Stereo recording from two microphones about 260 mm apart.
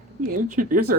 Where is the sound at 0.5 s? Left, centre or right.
Right.